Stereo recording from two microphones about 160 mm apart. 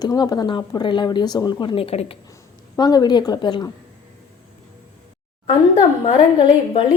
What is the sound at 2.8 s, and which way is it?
Speech, 25° left (ahead or behind).